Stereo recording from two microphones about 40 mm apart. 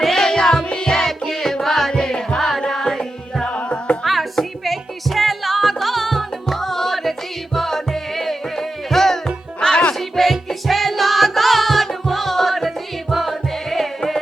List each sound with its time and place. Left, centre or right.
0.0 s music: centre
1.9 s music: centre
3.4 s music: left
4.0 s music: centre; by 9.9 s left
10.0 s music: centre